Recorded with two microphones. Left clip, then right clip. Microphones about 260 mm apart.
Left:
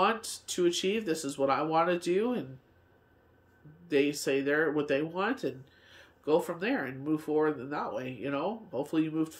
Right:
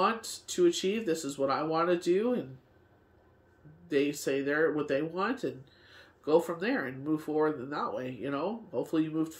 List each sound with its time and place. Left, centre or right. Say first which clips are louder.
0.0 s speech: left 1 dB; centre
3.8 s speech: left 1 dB; centre